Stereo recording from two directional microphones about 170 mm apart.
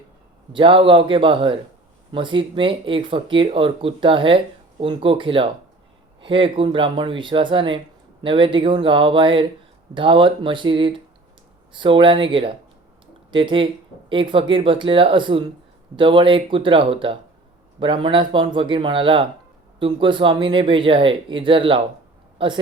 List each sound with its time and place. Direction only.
0.5 s speech: 30° right (ahead or behind)